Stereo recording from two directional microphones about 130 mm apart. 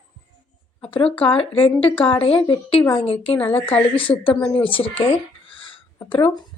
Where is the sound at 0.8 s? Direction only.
45° left (ahead or behind).